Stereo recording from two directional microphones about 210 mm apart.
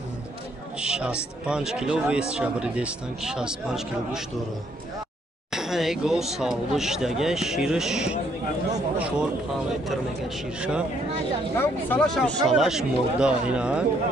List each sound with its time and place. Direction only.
0.7 s speech: 5° right (ahead or behind)
5.5 s speech: centre (ahead or behind)
11.5 s speech: 10° left (ahead or behind)